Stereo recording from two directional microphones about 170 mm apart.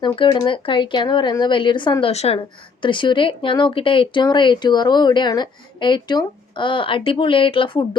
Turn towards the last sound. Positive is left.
turn(degrees=30)  # may be behind; listen again after turning